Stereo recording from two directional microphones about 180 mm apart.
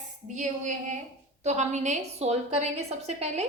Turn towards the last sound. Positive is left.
turn(degrees=-40)  # may be behind; listen again after turning